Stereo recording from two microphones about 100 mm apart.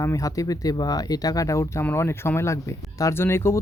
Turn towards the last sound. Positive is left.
turn(degrees=25)  # may be behind; listen again after turning